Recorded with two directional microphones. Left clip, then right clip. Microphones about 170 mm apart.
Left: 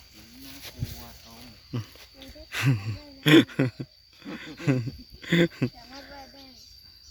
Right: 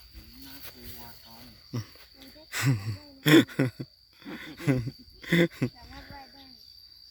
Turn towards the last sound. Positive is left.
turn(degrees=-5)  # may be behind; listen again after turning